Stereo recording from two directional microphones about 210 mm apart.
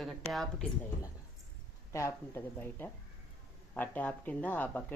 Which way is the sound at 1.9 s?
15° left (ahead or behind).